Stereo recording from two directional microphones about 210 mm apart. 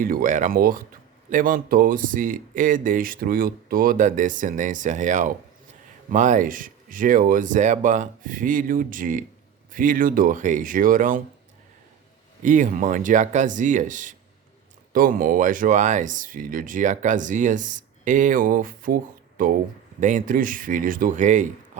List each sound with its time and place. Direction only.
0.0 s speech: 40° right (ahead or behind)
12.4 s speech: 40° right (ahead or behind)